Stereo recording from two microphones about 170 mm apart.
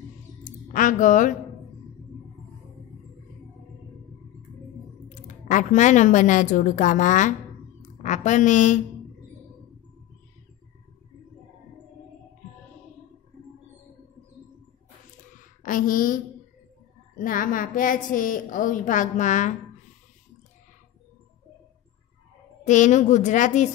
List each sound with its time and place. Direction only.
0.4 s a sound: 50° left (ahead or behind)
5.2 s a woman's voice: 45° left (ahead or behind)
15.6 s a woman's voice: 55° left (ahead or behind)
17.2 s a woman's voice: 55° left (ahead or behind)
22.7 s a woman's voice: 45° left (ahead or behind)